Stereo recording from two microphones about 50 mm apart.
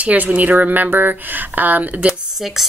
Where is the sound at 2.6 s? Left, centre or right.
Centre.